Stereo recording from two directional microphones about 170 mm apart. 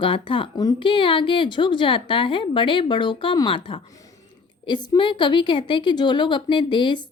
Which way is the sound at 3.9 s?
20° left (ahead or behind).